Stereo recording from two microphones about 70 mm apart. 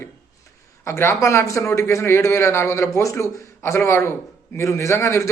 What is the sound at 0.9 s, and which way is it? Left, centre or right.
Speech, left.